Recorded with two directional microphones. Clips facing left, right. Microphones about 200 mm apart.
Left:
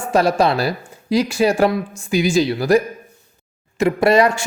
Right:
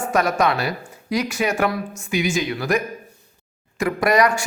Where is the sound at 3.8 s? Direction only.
25° left (ahead or behind).